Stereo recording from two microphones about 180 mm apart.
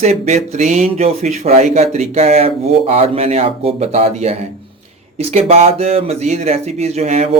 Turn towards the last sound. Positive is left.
turn(degrees=-35)  # may be behind; listen again after turning